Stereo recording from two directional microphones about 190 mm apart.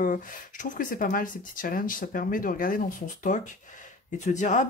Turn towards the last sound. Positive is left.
turn(degrees=40)  # may be behind; listen again after turning